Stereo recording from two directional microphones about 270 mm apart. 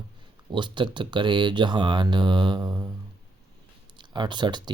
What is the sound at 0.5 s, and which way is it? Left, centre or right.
Speech, centre.